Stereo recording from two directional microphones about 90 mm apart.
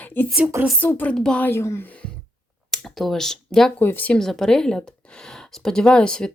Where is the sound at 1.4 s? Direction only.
30° left (ahead or behind).